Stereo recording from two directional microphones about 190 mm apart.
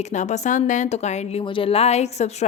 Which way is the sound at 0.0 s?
40° left (ahead or behind).